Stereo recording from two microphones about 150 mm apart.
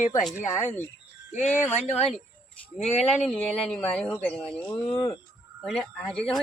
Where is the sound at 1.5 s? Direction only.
10° left (ahead or behind).